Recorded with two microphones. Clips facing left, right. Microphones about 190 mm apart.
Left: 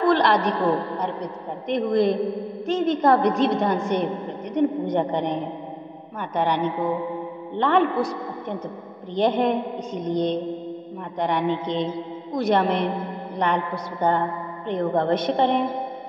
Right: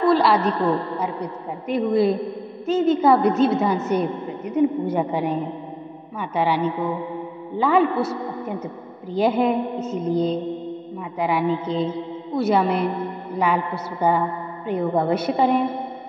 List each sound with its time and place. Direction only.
0.1 s a woman's voice: 5° right (ahead or behind)
7.9 s a man's voice: 15° left (ahead or behind)
9.1 s a woman's voice: 10° right (ahead or behind)